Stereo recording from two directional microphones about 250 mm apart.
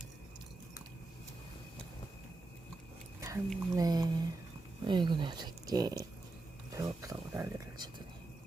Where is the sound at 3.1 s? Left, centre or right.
Centre.